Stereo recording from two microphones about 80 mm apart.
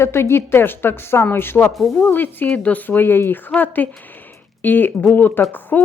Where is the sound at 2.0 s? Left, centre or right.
Left.